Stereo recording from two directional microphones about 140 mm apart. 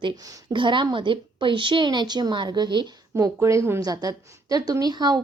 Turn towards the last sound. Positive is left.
turn(degrees=-30)  # may be behind; listen again after turning